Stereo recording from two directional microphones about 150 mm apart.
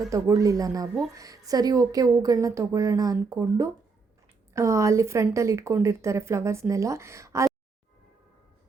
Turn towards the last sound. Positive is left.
turn(degrees=-20)  # may be behind; listen again after turning